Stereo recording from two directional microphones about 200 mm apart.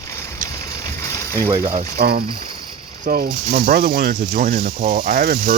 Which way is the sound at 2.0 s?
50° right (ahead or behind).